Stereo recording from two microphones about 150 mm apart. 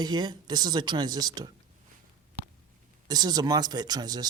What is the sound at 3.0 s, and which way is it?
Speech, 25° right (ahead or behind).